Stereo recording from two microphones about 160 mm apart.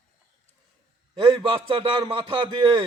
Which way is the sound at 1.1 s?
30° right (ahead or behind).